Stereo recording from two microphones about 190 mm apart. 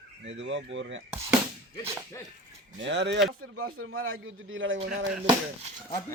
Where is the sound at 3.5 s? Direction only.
90° right.